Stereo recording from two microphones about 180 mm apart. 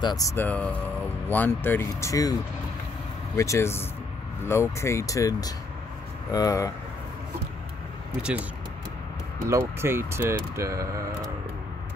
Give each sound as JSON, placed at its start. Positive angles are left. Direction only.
{"t": 0.0, "sound": "speech", "side_deg": 20}
{"t": 3.3, "sound": "speech", "side_deg": 15}
{"t": 9.5, "sound": "speech", "side_deg": -15}